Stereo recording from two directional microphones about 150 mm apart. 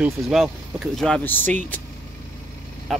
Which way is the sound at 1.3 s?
10° left (ahead or behind).